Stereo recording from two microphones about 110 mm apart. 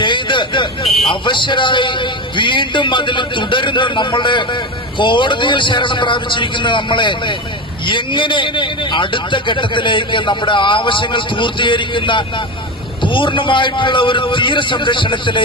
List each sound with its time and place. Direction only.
0.0 s vehicle: 45° left (ahead or behind)
0.9 s a sound: centre (ahead or behind)
1.1 s a man's voice: 45° left (ahead or behind)